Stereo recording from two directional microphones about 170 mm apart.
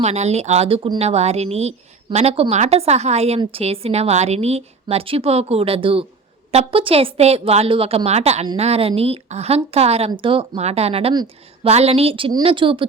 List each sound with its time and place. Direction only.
0.0 s speech: 40° right (ahead or behind)
11.1 s a woman's voice: 25° right (ahead or behind)
11.7 s speech: 35° right (ahead or behind)